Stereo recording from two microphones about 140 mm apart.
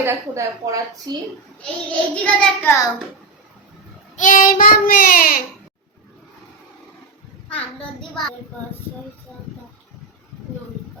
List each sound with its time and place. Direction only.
0.0 s a woman's voice: 20° right (ahead or behind)
1.6 s a child's voice: 10° left (ahead or behind)
4.2 s child singing: 70° left (ahead or behind); by 5.4 s 90° left
7.4 s a child's voice: 10° left (ahead or behind)